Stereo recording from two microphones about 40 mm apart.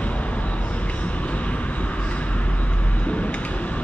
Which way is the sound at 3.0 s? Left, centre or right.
Left.